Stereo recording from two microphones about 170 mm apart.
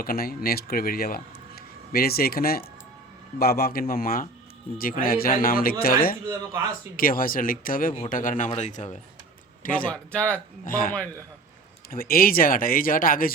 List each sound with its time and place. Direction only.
0.0 s speech: 60° left (ahead or behind)
6.2 s speech: 15° right (ahead or behind)
6.9 s a man's voice: 55° left (ahead or behind)
9.9 s speech: 5° left (ahead or behind)
10.7 s speech: 55° left (ahead or behind)